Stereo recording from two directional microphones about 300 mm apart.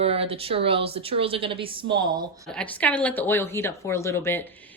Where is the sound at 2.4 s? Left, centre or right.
Centre.